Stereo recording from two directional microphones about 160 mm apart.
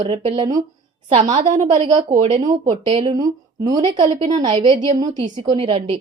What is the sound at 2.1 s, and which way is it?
Speech, 45° right (ahead or behind).